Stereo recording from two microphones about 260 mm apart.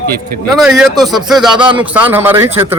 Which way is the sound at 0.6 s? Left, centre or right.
Centre.